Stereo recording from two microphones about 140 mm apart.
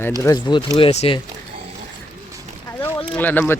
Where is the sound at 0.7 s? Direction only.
45° left (ahead or behind).